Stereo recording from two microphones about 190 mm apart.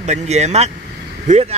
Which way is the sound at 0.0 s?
35° right (ahead or behind).